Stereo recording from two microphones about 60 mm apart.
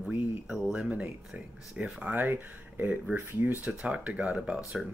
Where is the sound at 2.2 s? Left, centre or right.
Right.